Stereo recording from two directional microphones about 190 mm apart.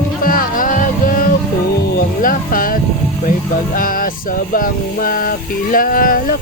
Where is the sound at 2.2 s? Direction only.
45° left (ahead or behind).